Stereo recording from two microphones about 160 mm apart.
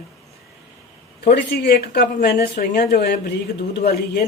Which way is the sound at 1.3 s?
85° left.